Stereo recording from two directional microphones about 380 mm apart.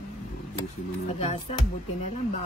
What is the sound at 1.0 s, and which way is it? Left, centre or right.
Speech, centre.